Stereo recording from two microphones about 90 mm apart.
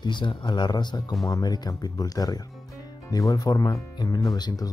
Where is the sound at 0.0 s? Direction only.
60° left (ahead or behind).